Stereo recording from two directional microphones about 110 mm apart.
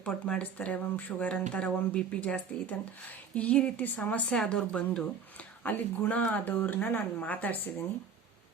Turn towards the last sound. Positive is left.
turn(degrees=15)  # may be behind; listen again after turning